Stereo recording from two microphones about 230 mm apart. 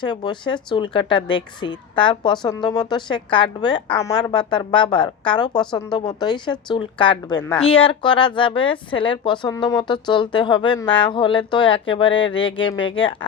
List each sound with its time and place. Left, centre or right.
0.0 s a woman's voice: centre